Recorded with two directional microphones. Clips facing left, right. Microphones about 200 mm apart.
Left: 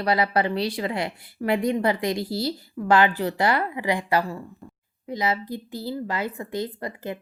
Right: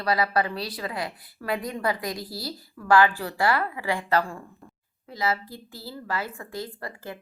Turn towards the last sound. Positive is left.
turn(degrees=20)  # may be behind; listen again after turning